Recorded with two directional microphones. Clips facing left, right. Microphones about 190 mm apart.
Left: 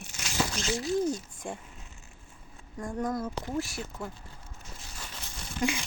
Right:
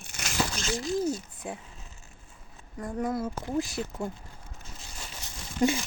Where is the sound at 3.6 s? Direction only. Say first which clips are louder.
Right 4 dB; 20° right (ahead or behind).